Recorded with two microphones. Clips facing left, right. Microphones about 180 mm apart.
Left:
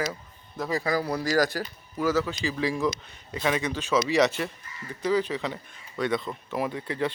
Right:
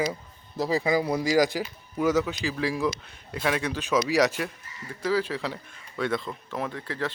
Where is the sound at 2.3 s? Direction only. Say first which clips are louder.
Even; 5° right (ahead or behind).